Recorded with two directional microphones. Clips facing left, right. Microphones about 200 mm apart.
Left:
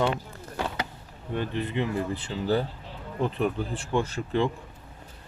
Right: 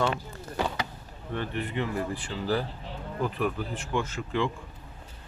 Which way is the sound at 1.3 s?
20° left (ahead or behind).